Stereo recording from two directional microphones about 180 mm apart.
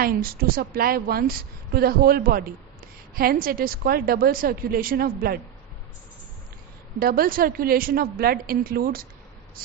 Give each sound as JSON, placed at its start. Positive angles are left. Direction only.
{"t": 0.0, "sound": "a woman's voice", "side_deg": -55}
{"t": 7.0, "sound": "a woman's voice", "side_deg": -55}